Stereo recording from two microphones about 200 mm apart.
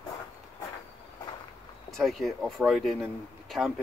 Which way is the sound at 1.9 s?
Centre (ahead or behind).